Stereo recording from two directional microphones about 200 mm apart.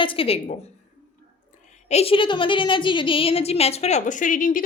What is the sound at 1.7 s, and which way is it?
A woman's voice, 30° left (ahead or behind).